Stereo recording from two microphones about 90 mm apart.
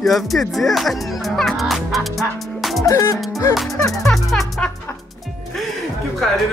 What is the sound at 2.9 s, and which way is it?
Music, 30° left (ahead or behind).